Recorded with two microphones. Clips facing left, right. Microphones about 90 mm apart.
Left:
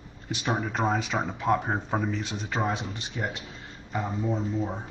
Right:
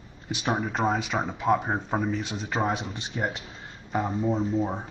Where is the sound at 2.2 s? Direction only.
15° right (ahead or behind).